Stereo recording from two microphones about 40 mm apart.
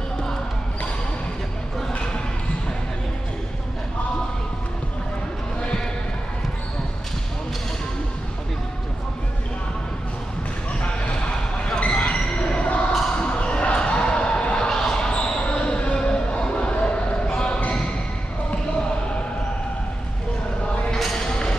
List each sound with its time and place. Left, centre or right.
11.5 s basketball bounce: left
14.7 s basketball bounce: centre
15.1 s basketball bounce: left
20.9 s a sound: centre